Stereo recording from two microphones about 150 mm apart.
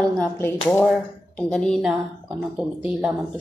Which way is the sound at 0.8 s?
Centre (ahead or behind).